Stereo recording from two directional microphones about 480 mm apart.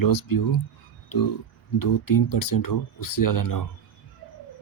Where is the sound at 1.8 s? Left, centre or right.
Left.